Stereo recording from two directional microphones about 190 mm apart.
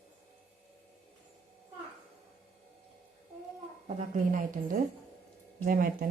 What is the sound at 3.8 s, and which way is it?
A woman's voice, 40° right (ahead or behind).